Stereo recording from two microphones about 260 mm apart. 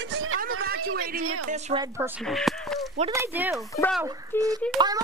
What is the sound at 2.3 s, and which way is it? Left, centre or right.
Speech, centre.